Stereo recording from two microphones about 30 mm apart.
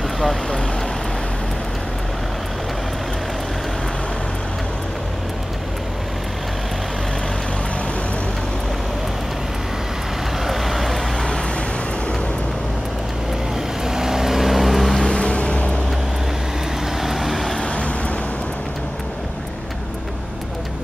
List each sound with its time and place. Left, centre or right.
10.4 s vehicle: centre
13.8 s vehicle: centre
15.1 s music: left
17.0 s vehicle: centre